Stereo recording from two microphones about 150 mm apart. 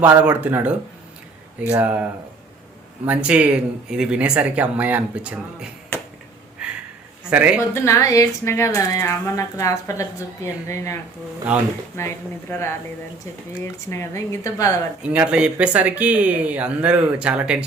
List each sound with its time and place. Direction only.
0.0 s speech: 10° right (ahead or behind)
3.1 s speech: 10° right (ahead or behind)
7.3 s speech: 10° right (ahead or behind)
7.6 s speech: 20° left (ahead or behind)
11.9 s speech: 15° left (ahead or behind)
13.9 s speech: 20° left (ahead or behind)
15.0 s speech: 10° right (ahead or behind)